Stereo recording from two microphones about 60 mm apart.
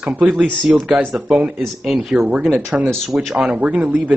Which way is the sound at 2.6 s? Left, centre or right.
Right.